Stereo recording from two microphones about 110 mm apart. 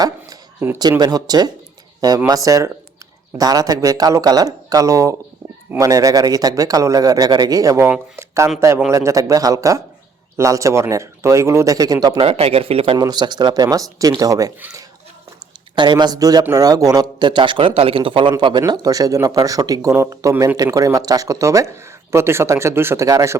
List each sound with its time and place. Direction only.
0.8 s a man's voice: 40° right (ahead or behind)
8.9 s a man's voice: 30° right (ahead or behind)
12.2 s speech: 60° right (ahead or behind)
13.0 s a man's voice: 40° right (ahead or behind)
15.7 s a man's voice: 40° right (ahead or behind)